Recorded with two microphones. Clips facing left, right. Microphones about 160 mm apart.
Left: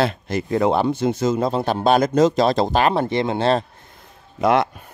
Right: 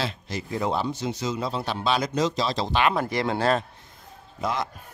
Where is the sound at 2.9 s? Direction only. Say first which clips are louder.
Left 5 dB; 25° left (ahead or behind).